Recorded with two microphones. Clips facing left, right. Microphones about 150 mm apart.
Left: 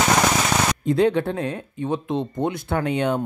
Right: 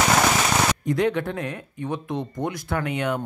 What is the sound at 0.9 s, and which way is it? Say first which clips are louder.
Speech: left 4 dB; 30° left (ahead or behind).